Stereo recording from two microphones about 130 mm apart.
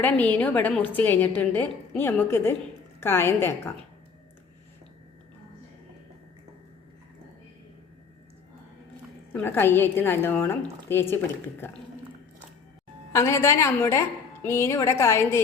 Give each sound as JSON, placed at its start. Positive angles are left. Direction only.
{"t": 0.0, "sound": "a woman's voice", "side_deg": 10}
{"t": 9.3, "sound": "a woman's voice", "side_deg": 15}
{"t": 13.1, "sound": "a woman's voice", "side_deg": 20}